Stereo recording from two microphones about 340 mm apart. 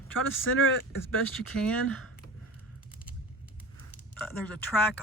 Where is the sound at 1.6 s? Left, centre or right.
Centre.